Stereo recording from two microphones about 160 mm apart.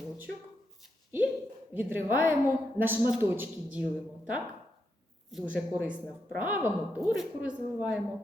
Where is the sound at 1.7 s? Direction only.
10° right (ahead or behind).